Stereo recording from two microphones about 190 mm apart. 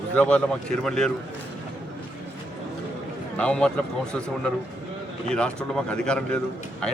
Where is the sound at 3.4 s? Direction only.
5° left (ahead or behind).